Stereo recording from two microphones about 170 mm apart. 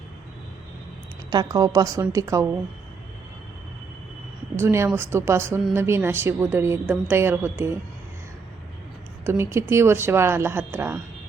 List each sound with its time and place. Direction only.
1.3 s a woman's voice: 20° right (ahead or behind)
4.5 s a woman's voice: 15° right (ahead or behind)
9.2 s a woman's voice: 15° right (ahead or behind)